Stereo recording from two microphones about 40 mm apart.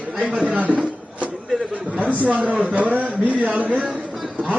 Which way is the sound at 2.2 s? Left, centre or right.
Right.